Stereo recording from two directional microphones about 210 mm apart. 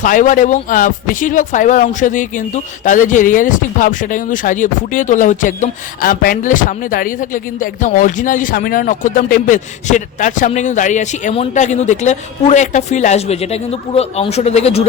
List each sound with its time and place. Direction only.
0.0 s speech: 40° left (ahead or behind)